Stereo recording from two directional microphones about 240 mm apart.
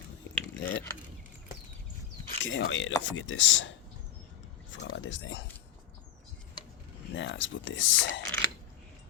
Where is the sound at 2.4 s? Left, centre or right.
Left.